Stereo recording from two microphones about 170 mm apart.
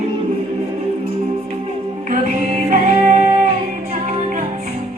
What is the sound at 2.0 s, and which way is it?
Music, 50° right (ahead or behind).